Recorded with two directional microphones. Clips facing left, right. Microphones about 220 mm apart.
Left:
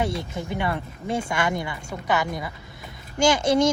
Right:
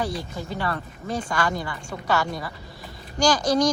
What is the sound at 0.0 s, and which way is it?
A woman's voice, 25° left (ahead or behind).